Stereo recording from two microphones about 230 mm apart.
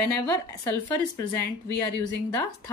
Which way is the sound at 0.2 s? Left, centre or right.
Centre.